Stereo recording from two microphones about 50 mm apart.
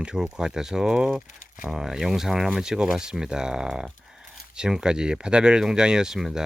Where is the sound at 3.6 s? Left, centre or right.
Centre.